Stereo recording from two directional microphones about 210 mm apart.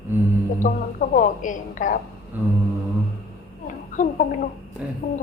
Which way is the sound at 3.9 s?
40° left (ahead or behind).